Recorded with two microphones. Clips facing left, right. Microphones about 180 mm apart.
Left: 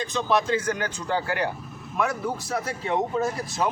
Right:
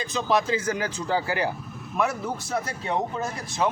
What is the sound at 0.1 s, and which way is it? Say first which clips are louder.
Speech: even; 5° right (ahead or behind).